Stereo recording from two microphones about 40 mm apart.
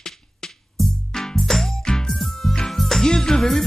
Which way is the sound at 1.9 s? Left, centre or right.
Centre.